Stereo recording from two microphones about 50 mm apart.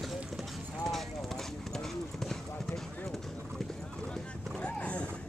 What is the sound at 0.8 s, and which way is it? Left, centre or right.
Clip-clop, centre.